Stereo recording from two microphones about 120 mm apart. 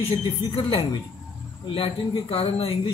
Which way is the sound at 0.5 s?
55° left (ahead or behind).